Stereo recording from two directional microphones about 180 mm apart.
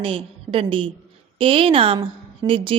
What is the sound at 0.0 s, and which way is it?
A woman's voice, 30° right (ahead or behind).